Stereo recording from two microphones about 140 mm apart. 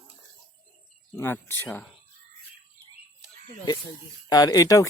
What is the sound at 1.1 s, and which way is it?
Speech, 15° left (ahead or behind).